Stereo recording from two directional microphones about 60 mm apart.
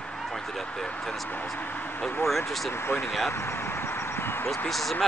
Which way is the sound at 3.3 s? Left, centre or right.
Left.